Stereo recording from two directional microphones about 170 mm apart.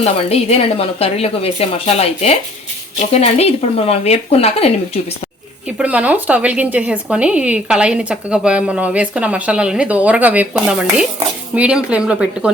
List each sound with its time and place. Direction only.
0.0 s a woman's voice: 40° left (ahead or behind)
5.7 s speech: 10° right (ahead or behind)